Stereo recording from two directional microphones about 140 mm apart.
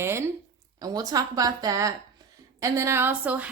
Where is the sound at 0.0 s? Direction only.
20° right (ahead or behind).